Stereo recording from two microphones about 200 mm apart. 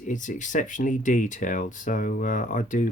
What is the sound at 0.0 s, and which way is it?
Speech, 40° left (ahead or behind).